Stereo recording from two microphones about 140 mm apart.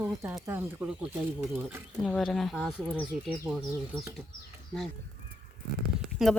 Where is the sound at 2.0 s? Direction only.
Centre (ahead or behind).